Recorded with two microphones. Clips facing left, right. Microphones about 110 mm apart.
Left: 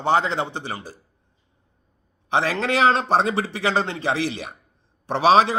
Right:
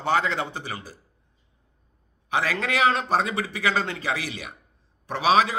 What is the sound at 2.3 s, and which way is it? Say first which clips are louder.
A man's voice: left 4 dB; 30° left (ahead or behind).